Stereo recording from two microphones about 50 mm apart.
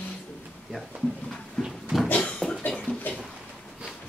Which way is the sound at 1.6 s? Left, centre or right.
Centre.